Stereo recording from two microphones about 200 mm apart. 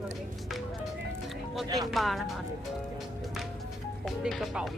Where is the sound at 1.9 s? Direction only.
Centre (ahead or behind).